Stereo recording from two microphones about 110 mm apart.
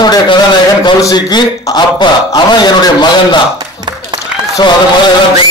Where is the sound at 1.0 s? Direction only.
40° left (ahead or behind).